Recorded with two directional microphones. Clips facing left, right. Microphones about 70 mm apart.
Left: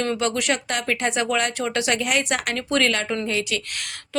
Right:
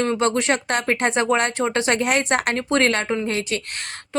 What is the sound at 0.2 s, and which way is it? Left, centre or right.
Speech, right.